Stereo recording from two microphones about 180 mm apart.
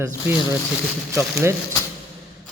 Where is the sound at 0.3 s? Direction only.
10° right (ahead or behind).